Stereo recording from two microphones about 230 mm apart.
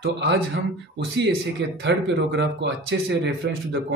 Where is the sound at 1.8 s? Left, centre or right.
Right.